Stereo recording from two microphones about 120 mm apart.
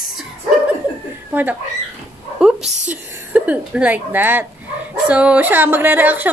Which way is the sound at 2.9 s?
10° right (ahead or behind).